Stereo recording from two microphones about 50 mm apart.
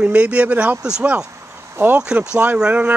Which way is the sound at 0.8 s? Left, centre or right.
Centre.